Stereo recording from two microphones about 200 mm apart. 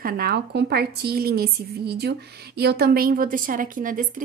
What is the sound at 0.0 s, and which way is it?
A woman's voice, 50° right (ahead or behind).